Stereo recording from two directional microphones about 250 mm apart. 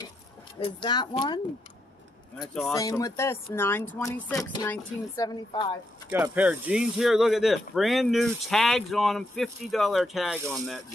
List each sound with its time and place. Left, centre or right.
0.6 s speech: centre
2.3 s speech: centre
2.7 s speech: centre
6.1 s speech: centre